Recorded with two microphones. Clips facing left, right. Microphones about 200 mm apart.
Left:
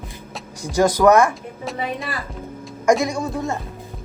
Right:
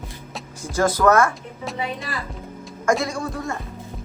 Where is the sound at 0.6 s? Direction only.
15° left (ahead or behind).